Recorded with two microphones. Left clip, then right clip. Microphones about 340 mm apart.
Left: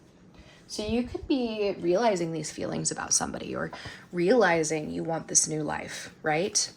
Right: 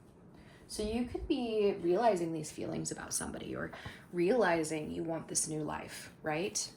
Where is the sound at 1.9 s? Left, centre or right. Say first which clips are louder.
Left 7 dB; left.